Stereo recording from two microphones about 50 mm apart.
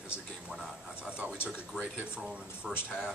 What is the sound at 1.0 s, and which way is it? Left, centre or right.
Speech, right.